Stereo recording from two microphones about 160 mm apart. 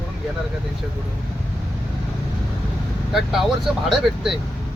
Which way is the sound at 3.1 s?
Centre (ahead or behind).